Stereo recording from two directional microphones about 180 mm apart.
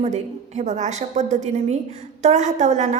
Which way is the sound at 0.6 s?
40° right (ahead or behind).